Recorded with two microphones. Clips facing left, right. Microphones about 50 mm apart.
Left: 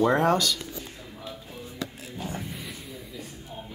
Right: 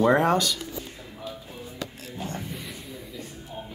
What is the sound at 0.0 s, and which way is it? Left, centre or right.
Speech, centre.